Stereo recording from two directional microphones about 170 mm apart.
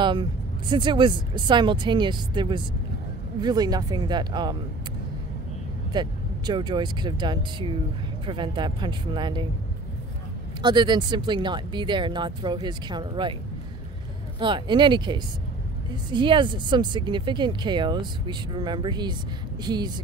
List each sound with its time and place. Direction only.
0.0 s speech: 25° right (ahead or behind)
5.9 s speech: 25° right (ahead or behind)
10.6 s speech: 25° right (ahead or behind)
14.4 s speech: 25° right (ahead or behind)